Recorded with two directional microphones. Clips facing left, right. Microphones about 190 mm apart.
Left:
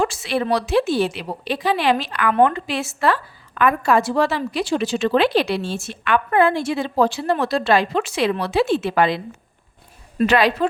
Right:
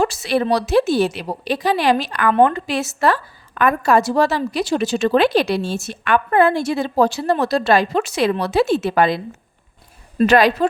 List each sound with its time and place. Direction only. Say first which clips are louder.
0.0 s a woman's voice: right 3 dB; 40° right (ahead or behind)